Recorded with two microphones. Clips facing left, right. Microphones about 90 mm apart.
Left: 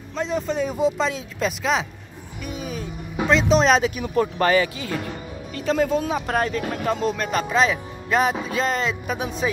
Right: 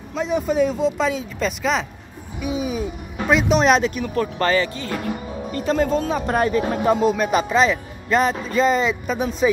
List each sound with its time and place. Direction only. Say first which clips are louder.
0.1 s speech: right 3 dB; 5° right (ahead or behind)
0.7 s speech: right 1 dB; 5° left (ahead or behind)
2.4 s music: right 7 dB; 10° right (ahead or behind)
3.3 s speech: right 1 dB; 10° right (ahead or behind)
3.5 s speech: right 1 dB; centre (ahead or behind)
4.9 s speech: right 3 dB; 5° right (ahead or behind)
6.2 s speech: right 4 dB; 5° right (ahead or behind)
6.6 s speech: right 5 dB; 20° right (ahead or behind)
7.0 s speech: right 5 dB; 5° right (ahead or behind)
7.4 s speech: right 2 dB; centre (ahead or behind)